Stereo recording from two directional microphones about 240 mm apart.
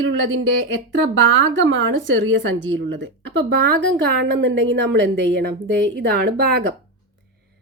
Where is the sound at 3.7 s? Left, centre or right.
Right.